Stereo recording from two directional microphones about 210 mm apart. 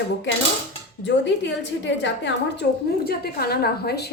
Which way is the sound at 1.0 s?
55° left (ahead or behind).